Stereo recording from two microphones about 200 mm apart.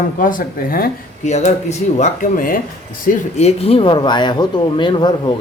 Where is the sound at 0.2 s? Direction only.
40° left (ahead or behind).